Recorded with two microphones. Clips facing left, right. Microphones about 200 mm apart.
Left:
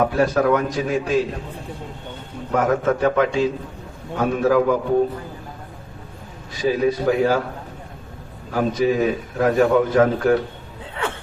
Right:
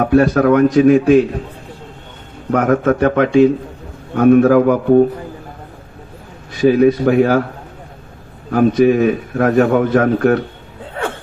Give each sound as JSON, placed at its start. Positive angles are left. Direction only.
{"t": 0.0, "sound": "a man's voice", "side_deg": -60}
{"t": 2.5, "sound": "a man's voice", "side_deg": -60}
{"t": 6.5, "sound": "a man's voice", "side_deg": -60}
{"t": 8.4, "sound": "a man's voice", "side_deg": -60}